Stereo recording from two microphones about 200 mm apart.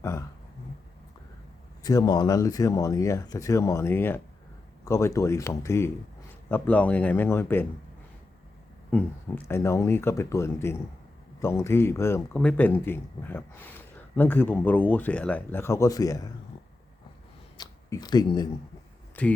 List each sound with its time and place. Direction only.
0.0 s a sound: 15° left (ahead or behind)
1.8 s speech: 15° left (ahead or behind)
8.9 s speech: 10° left (ahead or behind)
17.6 s speech: 20° left (ahead or behind)
19.2 s speech: 10° left (ahead or behind)